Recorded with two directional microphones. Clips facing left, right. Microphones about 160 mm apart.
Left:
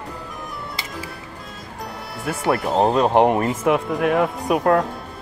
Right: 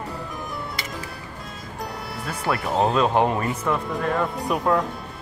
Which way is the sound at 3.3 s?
70° left (ahead or behind).